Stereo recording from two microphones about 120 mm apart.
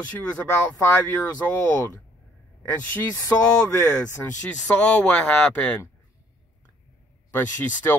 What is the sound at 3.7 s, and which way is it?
Speech, 15° left (ahead or behind).